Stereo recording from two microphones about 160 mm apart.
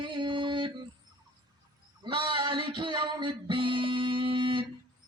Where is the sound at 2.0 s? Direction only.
30° right (ahead or behind).